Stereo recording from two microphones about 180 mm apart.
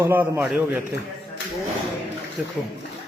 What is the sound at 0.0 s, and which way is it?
Speech, 10° right (ahead or behind).